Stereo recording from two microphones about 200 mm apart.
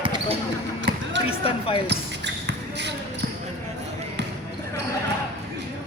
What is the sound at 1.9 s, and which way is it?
Basketball bounce, 60° right (ahead or behind).